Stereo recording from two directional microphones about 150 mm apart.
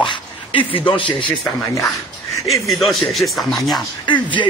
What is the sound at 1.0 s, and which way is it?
Speech, centre (ahead or behind).